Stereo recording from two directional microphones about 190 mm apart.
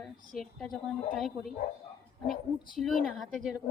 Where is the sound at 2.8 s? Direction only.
Centre (ahead or behind).